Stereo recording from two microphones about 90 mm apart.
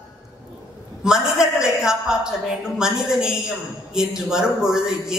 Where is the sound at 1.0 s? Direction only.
5° right (ahead or behind).